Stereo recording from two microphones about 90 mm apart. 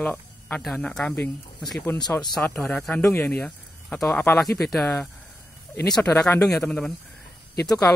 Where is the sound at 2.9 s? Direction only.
25° left (ahead or behind).